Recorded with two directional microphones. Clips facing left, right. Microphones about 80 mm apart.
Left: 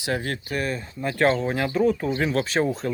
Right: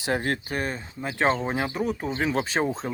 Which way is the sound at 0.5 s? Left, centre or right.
Right.